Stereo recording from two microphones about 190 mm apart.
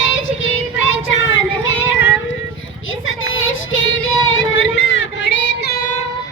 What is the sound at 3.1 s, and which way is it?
Child singing, 90° left.